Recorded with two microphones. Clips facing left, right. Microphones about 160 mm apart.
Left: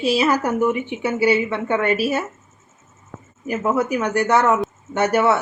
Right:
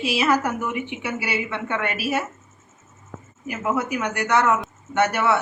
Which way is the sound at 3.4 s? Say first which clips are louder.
Left 5 dB; 35° left (ahead or behind).